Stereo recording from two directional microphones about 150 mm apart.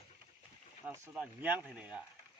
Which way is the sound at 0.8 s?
10° right (ahead or behind).